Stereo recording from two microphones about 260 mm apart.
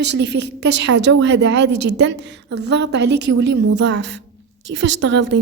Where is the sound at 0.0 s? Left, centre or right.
Right.